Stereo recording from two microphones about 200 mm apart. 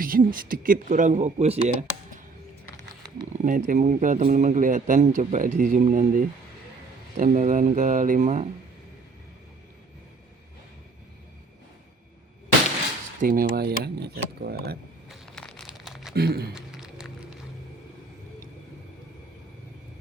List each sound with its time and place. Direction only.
0.0 s speech: 45° right (ahead or behind)
3.4 s speech: 40° right (ahead or behind)
13.1 s speech: 45° right (ahead or behind)
15.1 s crumpling: 5° left (ahead or behind)
16.1 s speech: 50° right (ahead or behind)
16.6 s music: 5° right (ahead or behind)